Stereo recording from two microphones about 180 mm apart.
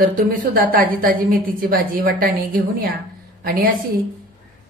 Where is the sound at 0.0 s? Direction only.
50° right (ahead or behind).